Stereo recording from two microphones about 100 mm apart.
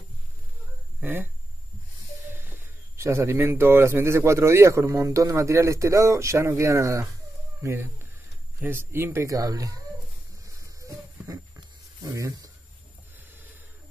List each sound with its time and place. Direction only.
1.0 s a man's voice: 20° right (ahead or behind)
2.3 s a man's voice: 20° right (ahead or behind)
10.4 s a sound: 30° right (ahead or behind)